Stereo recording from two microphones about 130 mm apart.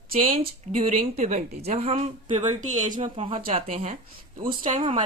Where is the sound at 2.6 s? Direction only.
70° right (ahead or behind).